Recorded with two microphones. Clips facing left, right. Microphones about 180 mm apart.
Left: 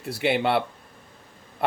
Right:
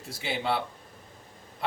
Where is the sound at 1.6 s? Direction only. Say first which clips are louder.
Left 7 dB; 60° left (ahead or behind).